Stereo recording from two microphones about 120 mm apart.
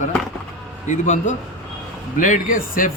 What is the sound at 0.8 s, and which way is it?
Speech, 90° left.